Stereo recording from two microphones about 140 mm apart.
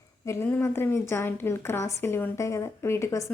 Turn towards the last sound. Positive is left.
turn(degrees=20)  # may be behind; listen again after turning